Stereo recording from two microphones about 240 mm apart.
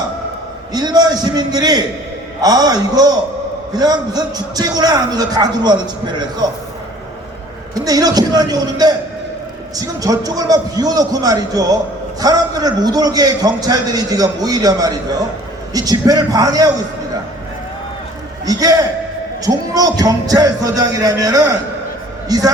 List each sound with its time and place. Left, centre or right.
0.7 s a man's voice: centre
7.8 s a man's voice: centre
18.4 s a man's voice: centre